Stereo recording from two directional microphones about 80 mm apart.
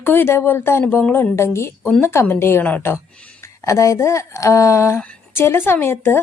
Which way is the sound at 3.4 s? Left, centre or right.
Left.